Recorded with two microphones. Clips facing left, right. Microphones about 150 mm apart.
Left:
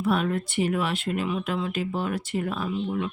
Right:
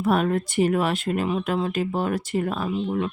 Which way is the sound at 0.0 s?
45° right (ahead or behind).